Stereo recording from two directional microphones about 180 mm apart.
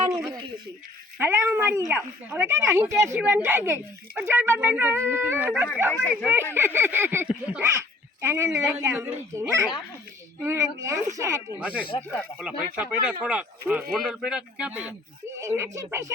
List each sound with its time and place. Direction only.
0.1 s a sound: 15° right (ahead or behind)
1.2 s a woman's voice: 10° right (ahead or behind)
5.9 s speech: 5° left (ahead or behind)
6.3 s a woman's voice: 15° right (ahead or behind)